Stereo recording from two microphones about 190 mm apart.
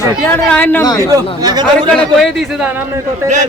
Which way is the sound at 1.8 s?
5° left (ahead or behind).